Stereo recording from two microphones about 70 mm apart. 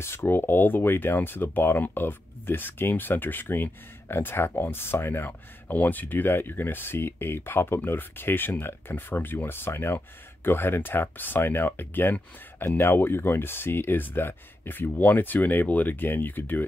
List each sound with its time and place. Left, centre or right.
0.0 s speech: left